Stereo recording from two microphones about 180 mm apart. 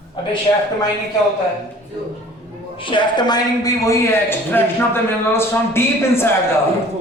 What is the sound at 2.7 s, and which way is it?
A man's voice, 25° left (ahead or behind).